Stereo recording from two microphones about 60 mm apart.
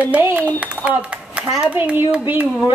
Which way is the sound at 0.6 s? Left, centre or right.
Centre.